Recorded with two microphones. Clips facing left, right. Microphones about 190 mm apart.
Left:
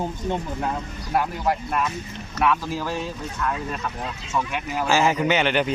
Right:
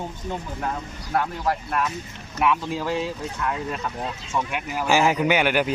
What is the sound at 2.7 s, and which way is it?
Speech, 20° right (ahead or behind).